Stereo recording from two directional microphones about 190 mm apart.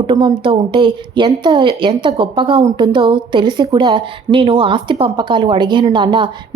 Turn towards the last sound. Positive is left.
turn(degrees=-25)  # may be behind; listen again after turning